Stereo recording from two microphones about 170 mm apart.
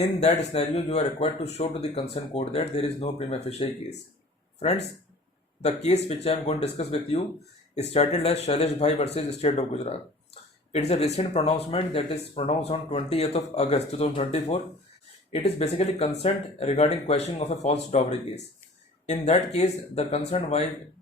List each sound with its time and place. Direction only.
0.5 s speech: 40° left (ahead or behind)
4.6 s speech: 40° left (ahead or behind)